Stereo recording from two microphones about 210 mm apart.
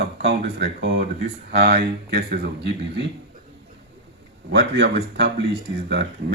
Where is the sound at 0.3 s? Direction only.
50° right (ahead or behind).